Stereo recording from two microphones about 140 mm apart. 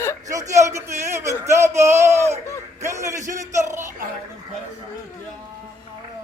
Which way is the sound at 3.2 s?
60° right (ahead or behind).